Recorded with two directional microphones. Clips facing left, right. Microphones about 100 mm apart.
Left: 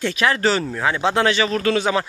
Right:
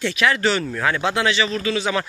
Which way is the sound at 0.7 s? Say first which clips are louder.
Left 1 dB; 20° left (ahead or behind).